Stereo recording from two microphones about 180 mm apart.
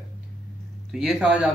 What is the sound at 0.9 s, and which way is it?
Speech, 5° right (ahead or behind).